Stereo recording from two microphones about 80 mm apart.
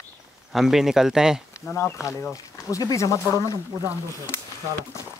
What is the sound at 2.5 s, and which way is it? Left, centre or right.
Speech, left.